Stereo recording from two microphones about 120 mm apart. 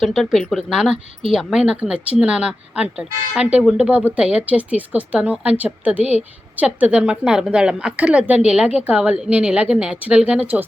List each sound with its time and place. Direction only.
0.0 s speech: centre (ahead or behind)
6.0 s a woman's voice: 60° left (ahead or behind)
6.6 s speech: 10° right (ahead or behind)